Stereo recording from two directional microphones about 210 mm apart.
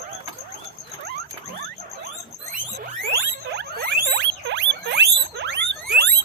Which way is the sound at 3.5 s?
55° right (ahead or behind).